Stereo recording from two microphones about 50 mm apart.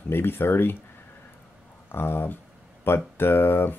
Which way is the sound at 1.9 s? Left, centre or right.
Left.